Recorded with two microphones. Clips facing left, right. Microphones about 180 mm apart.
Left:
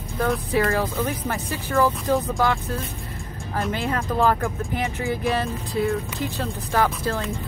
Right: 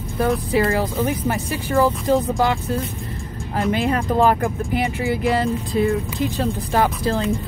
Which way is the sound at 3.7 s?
15° right (ahead or behind).